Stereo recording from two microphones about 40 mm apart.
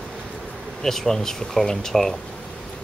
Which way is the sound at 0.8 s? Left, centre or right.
Centre.